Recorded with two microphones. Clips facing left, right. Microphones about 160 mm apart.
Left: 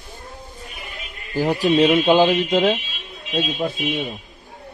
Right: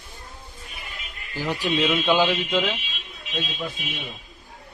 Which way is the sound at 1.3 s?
40° left (ahead or behind).